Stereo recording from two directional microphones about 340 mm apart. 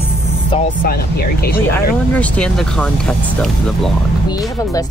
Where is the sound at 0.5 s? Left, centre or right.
Left.